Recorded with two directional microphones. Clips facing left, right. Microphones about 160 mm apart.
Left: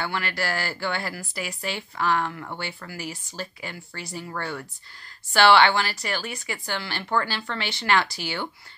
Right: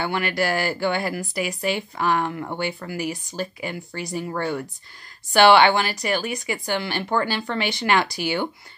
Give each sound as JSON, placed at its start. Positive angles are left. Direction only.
{"t": 0.0, "sound": "speech", "side_deg": -15}